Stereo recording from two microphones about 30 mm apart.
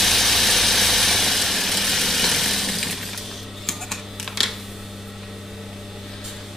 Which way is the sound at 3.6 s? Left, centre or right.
Centre.